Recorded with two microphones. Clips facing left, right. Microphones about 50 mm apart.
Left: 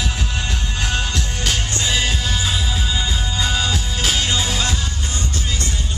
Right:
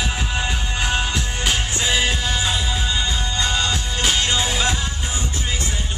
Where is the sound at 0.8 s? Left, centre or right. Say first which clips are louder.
Right 1 dB; centre.